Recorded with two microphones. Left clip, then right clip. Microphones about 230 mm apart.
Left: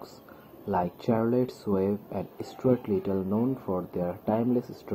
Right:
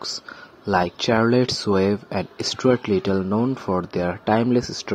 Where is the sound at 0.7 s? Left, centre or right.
Right.